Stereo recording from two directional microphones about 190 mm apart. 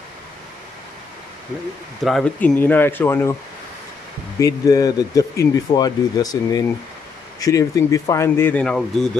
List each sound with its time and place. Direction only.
2.0 s speech: 5° left (ahead or behind)
4.4 s speech: 20° left (ahead or behind); by 9.1 s 5° left (ahead or behind)